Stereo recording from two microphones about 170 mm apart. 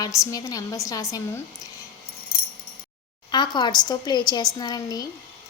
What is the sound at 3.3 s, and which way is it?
A woman's voice, 25° left (ahead or behind).